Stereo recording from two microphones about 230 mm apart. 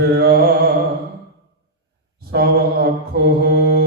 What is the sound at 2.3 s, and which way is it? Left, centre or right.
Mantra, right.